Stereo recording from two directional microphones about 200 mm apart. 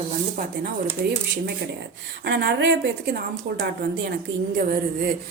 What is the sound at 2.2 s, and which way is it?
Speech, 55° right (ahead or behind).